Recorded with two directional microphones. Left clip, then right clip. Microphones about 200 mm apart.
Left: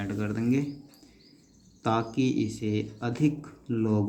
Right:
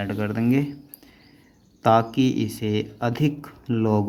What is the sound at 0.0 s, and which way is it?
Speech, 40° right (ahead or behind).